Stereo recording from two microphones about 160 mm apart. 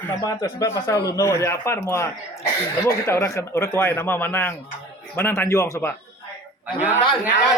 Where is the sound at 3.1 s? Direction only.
20° left (ahead or behind).